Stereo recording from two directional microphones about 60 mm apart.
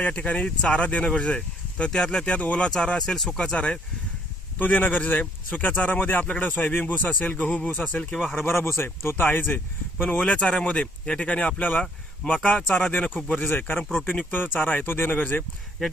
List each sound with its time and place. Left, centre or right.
0.0 s speech: left
4.5 s speech: left
8.4 s speech: left